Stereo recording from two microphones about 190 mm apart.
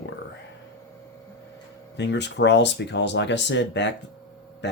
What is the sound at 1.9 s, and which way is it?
Speech, 65° left (ahead or behind).